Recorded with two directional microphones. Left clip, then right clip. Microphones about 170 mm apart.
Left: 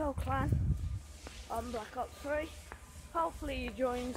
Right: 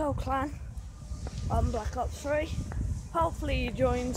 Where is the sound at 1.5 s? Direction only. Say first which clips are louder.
Right 6 dB; 10° right (ahead or behind).